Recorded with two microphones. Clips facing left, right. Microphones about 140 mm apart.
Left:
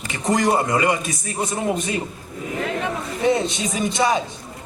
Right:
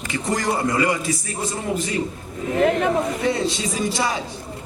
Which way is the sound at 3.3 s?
20° left (ahead or behind).